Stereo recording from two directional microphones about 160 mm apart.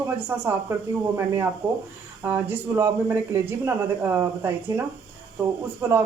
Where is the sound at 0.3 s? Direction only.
15° right (ahead or behind).